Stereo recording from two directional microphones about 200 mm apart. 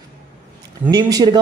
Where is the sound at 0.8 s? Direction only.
20° right (ahead or behind).